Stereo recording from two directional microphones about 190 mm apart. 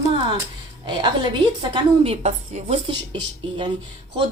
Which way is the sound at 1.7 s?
35° right (ahead or behind).